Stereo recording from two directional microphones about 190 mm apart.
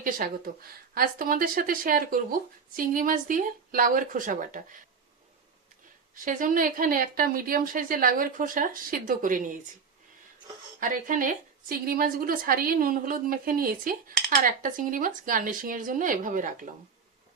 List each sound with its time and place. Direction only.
0.0 s speech: 50° right (ahead or behind)
6.1 s speech: 45° right (ahead or behind)
10.8 s speech: 45° right (ahead or behind)